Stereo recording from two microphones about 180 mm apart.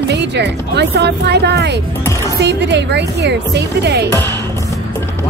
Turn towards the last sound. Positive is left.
turn(degrees=-70)  # may be behind; listen again after turning